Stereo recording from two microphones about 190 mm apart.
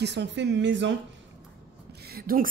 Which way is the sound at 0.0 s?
65° right (ahead or behind).